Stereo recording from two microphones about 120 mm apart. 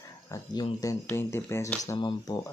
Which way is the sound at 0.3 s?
35° left (ahead or behind).